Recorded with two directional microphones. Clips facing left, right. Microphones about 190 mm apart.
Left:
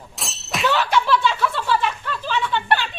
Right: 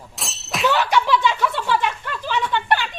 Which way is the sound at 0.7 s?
15° right (ahead or behind).